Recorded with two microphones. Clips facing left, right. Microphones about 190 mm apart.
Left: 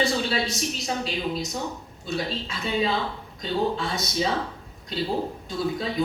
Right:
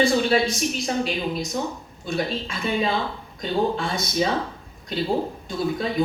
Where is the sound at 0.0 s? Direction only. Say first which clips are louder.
Right 5 dB; 50° right (ahead or behind).